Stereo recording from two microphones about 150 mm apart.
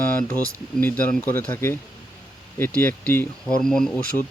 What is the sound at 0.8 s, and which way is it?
Speech, 10° left (ahead or behind).